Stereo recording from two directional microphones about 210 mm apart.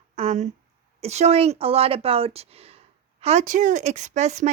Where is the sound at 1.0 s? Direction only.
30° right (ahead or behind).